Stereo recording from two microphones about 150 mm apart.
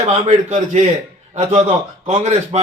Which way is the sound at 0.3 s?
50° right (ahead or behind).